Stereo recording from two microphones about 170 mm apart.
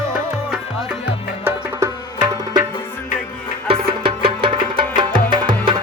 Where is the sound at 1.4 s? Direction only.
20° right (ahead or behind).